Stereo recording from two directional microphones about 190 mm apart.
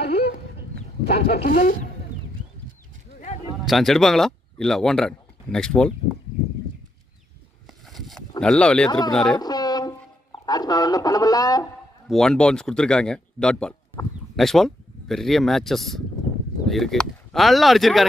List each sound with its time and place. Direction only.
0.0 s chicken: 60° left (ahead or behind)
1.0 s speech: 55° left (ahead or behind)
3.6 s speech: centre (ahead or behind)
7.8 s a sound: centre (ahead or behind)
8.4 s speech: 5° left (ahead or behind)
9.4 s a sound: 20° left (ahead or behind)
12.1 s speech: 5° left (ahead or behind)